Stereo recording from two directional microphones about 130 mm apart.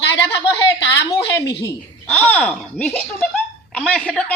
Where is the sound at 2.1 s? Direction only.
10° left (ahead or behind).